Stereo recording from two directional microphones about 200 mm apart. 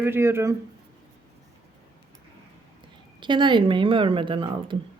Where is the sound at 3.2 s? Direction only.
25° right (ahead or behind).